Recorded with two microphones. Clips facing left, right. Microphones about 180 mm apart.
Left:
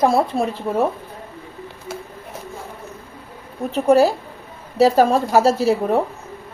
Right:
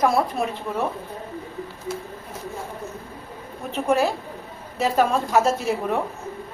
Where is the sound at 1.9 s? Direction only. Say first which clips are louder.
Right 1 dB; 70° left (ahead or behind).